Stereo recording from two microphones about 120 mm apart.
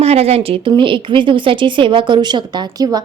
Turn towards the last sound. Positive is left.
turn(degrees=-30)  # may be behind; listen again after turning